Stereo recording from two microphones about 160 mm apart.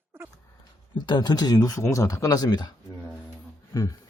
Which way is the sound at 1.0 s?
25° left (ahead or behind).